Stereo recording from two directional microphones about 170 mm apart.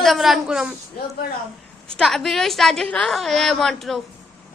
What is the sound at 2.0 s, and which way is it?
A woman's voice, centre (ahead or behind).